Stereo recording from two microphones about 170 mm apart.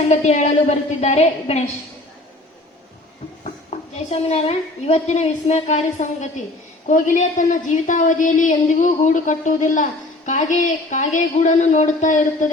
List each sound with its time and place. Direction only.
0.1 s a woman's voice: 40° left (ahead or behind)
3.7 s a sound: 40° left (ahead or behind)
4.3 s a woman's voice: 40° left (ahead or behind)